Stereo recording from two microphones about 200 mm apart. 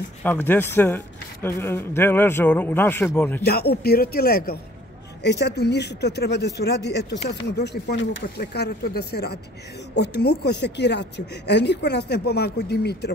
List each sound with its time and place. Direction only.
0.2 s speech: 10° left (ahead or behind)
3.4 s speech: 50° left (ahead or behind)